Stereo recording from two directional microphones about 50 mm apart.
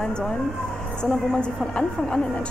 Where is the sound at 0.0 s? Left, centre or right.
Centre.